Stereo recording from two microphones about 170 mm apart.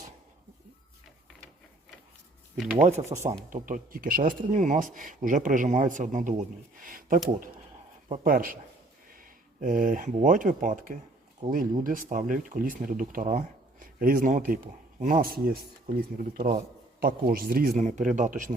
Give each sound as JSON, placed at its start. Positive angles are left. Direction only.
{"t": 2.8, "sound": "speech", "side_deg": -40}